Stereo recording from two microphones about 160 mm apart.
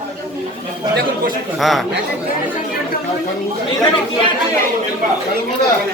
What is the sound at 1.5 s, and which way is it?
Speech, centre (ahead or behind).